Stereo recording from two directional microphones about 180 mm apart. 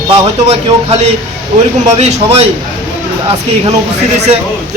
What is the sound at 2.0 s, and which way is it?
Speech, 35° right (ahead or behind).